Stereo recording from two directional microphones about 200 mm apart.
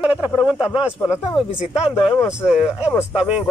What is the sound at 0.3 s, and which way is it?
Speech, centre (ahead or behind).